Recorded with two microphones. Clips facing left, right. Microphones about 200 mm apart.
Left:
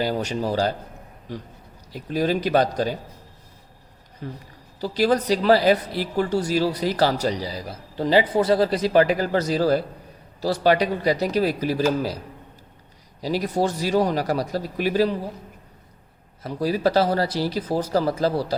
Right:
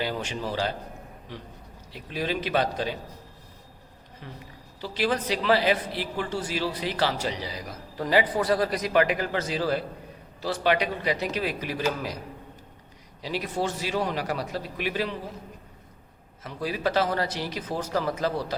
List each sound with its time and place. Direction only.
0.0 s a woman's voice: 40° left (ahead or behind)
4.2 s a woman's voice: 40° left (ahead or behind)
13.2 s a woman's voice: 40° left (ahead or behind)
16.4 s a woman's voice: 40° left (ahead or behind)